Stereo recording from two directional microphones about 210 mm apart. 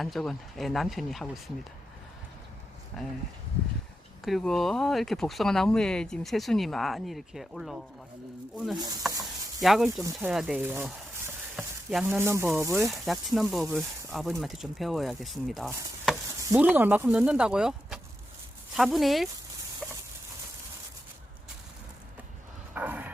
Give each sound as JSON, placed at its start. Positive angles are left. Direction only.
{"t": 0.0, "sound": "speech", "side_deg": 0}
{"t": 2.9, "sound": "speech", "side_deg": 0}
{"t": 4.2, "sound": "speech", "side_deg": 0}
{"t": 8.8, "sound": "speech", "side_deg": -15}
{"t": 9.6, "sound": "speech", "side_deg": 0}
{"t": 12.9, "sound": "speech", "side_deg": 0}
{"t": 19.8, "sound": "a sound", "side_deg": -5}
{"t": 22.7, "sound": "a sound", "side_deg": -10}